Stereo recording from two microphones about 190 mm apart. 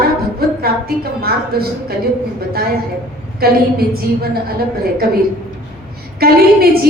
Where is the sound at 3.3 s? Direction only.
55° right (ahead or behind).